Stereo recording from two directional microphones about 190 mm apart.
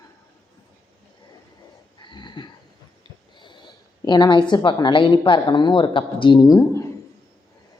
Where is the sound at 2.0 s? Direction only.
25° left (ahead or behind).